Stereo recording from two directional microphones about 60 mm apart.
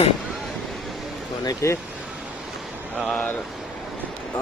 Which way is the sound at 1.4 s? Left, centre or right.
Left.